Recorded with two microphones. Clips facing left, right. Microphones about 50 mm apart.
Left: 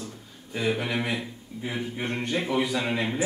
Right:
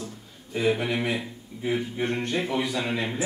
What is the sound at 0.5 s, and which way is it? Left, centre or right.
Speech, centre.